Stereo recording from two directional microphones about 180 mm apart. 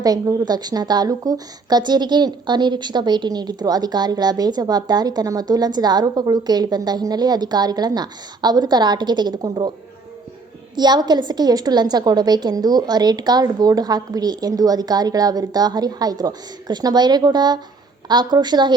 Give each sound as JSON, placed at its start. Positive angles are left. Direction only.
{"t": 0.0, "sound": "a woman's voice", "side_deg": -20}
{"t": 10.8, "sound": "a woman's voice", "side_deg": -25}